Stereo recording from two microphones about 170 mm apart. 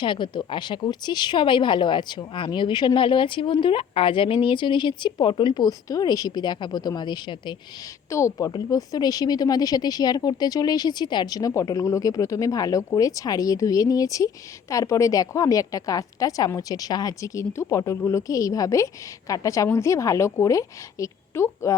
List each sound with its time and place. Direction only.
0.0 s a woman's voice: 30° left (ahead or behind)